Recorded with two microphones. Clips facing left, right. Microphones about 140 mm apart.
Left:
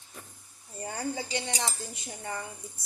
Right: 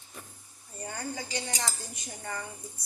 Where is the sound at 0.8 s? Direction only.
30° left (ahead or behind).